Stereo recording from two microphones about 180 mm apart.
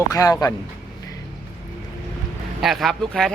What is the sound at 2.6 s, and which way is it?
Speech, centre (ahead or behind).